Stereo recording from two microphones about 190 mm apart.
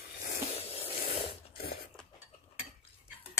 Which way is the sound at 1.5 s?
55° left (ahead or behind).